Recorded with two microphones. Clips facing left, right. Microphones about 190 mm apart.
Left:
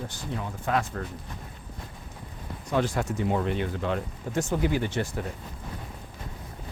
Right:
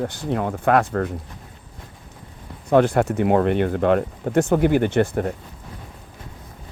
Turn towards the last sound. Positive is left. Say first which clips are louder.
# right 10 dB
turn(degrees=-60)  # may be behind; listen again after turning